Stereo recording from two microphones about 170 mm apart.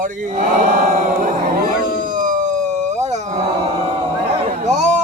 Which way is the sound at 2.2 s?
50° right (ahead or behind).